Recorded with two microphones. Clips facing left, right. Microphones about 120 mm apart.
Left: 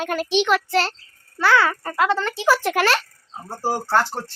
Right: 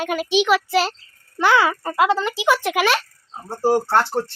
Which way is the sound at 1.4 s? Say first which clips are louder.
Right 1 dB; 15° right (ahead or behind).